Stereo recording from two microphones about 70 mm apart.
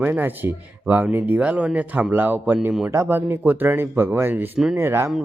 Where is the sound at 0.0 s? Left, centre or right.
Right.